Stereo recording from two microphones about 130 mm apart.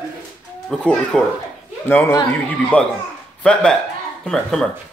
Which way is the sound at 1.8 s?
15° left (ahead or behind).